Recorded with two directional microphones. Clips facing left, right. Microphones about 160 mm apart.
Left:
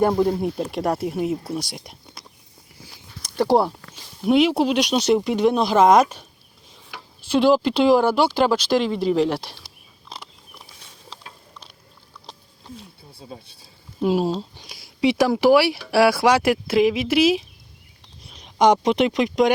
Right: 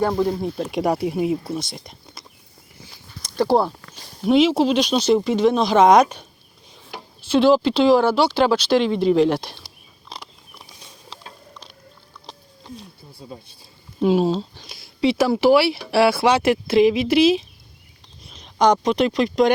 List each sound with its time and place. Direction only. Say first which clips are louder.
0.0 s speech: left 2 dB; 15° left (ahead or behind)
0.3 s speech: even; 5° left (ahead or behind)
3.3 s speech: even; 10° left (ahead or behind)
7.3 s speech: right 2 dB; 10° left (ahead or behind)
10.1 s a sound: right 1 dB; 5° left (ahead or behind)
14.0 s speech: right 3 dB; 5° left (ahead or behind)
18.3 s a sound: right 1 dB; 10° left (ahead or behind)
18.6 s speech: even; 20° left (ahead or behind)